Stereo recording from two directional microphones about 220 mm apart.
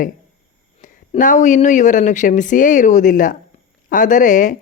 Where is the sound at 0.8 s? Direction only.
35° left (ahead or behind).